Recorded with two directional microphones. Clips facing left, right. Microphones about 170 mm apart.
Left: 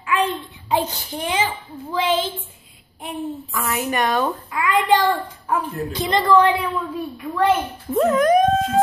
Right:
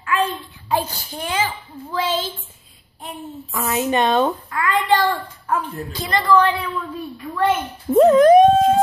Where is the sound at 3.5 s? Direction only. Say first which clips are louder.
Right 5 dB; 25° right (ahead or behind).